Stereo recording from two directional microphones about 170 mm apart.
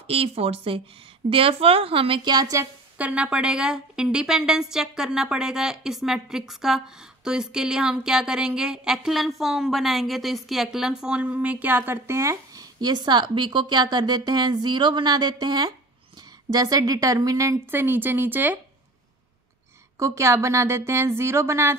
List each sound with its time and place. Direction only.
0.0 s a woman's voice: 35° right (ahead or behind)
3.0 s a woman's voice: 5° right (ahead or behind)
20.0 s a woman's voice: 15° right (ahead or behind)